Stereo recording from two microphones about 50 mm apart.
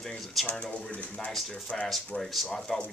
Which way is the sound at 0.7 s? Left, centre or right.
Left.